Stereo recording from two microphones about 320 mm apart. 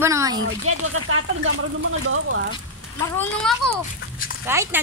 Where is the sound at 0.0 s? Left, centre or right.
Centre.